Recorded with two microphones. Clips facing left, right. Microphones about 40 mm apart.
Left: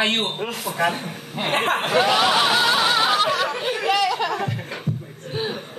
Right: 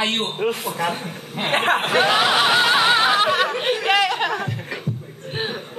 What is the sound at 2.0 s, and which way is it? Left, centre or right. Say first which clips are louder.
Speech: left 1 dB; right.